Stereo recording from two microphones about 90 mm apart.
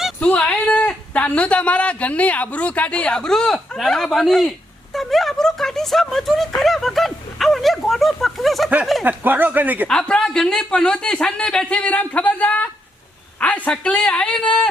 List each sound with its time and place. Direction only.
0.2 s speech: 15° left (ahead or behind)
6.6 s a sound: 5° left (ahead or behind)
8.8 s speech: centre (ahead or behind)
9.0 s speech: 20° right (ahead or behind)
10.0 s speech: 5° left (ahead or behind)